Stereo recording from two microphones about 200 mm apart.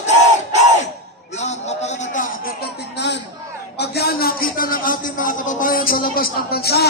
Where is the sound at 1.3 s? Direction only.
35° left (ahead or behind); by 3.2 s 60° left (ahead or behind).